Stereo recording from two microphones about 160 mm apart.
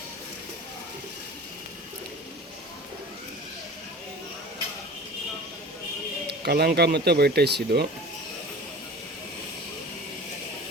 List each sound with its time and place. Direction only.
6.4 s speech: 85° right